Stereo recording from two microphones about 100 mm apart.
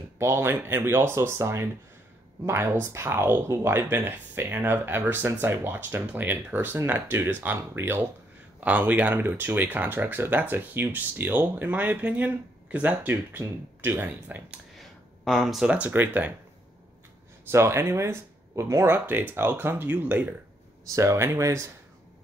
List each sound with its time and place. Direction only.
0.2 s speech: 25° right (ahead or behind)
14.8 s speech: centre (ahead or behind); by 16.3 s 15° right (ahead or behind)
17.5 s speech: 25° right (ahead or behind)
20.9 s speech: 30° right (ahead or behind)